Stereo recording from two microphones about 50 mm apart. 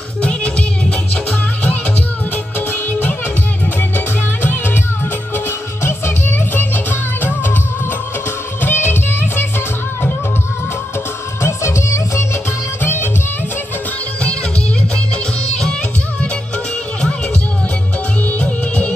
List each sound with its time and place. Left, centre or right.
0.2 s music: left
2.9 s music: left
5.8 s music: left
8.5 s music: left
11.4 s music: left
12.8 s music: left
18.4 s music: left